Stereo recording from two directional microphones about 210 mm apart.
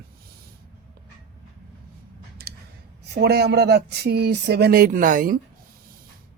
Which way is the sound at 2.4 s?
50° right (ahead or behind).